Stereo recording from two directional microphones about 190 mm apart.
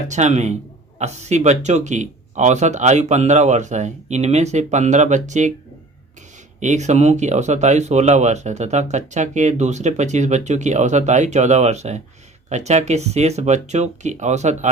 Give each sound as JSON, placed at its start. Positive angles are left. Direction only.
{"t": 0.1, "sound": "speech", "side_deg": -35}
{"t": 6.6, "sound": "speech", "side_deg": -40}